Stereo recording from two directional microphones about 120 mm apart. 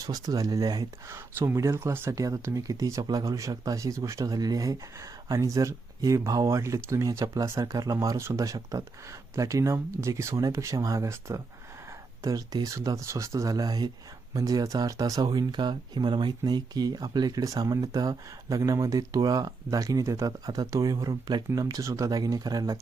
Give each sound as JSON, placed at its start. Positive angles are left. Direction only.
{"t": 0.0, "sound": "speech", "side_deg": -30}
{"t": 1.1, "sound": "speech", "side_deg": -20}